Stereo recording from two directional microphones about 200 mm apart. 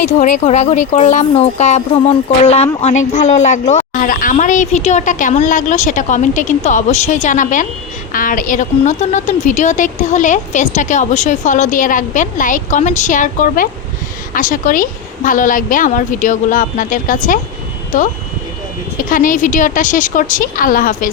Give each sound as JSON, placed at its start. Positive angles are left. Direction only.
{"t": 0.0, "sound": "a woman's voice", "side_deg": 35}
{"t": 18.9, "sound": "a woman's voice", "side_deg": 40}